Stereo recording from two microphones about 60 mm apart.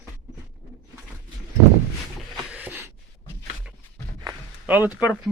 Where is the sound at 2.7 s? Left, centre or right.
Right.